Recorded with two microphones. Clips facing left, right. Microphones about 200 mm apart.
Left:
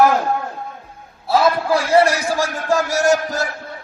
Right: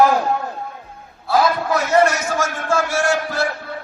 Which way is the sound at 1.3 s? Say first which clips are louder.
Left 2 dB; 30° left (ahead or behind).